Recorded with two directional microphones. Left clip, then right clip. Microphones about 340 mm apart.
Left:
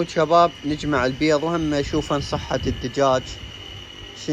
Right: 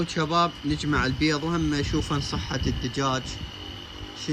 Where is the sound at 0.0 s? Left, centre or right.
Centre.